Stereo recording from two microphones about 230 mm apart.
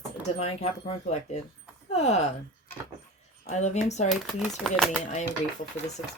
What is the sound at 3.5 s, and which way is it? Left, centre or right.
Speech, left.